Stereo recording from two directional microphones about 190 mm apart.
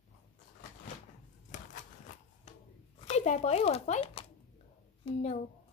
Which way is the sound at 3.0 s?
35° left (ahead or behind).